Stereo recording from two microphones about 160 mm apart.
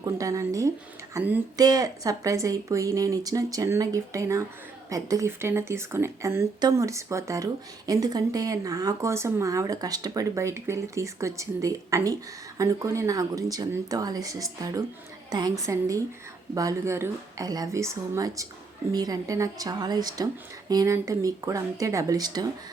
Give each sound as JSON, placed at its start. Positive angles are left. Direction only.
{"t": 0.0, "sound": "a woman's voice", "side_deg": -20}
{"t": 1.1, "sound": "a sound", "side_deg": -10}
{"t": 1.5, "sound": "a woman's voice", "side_deg": -25}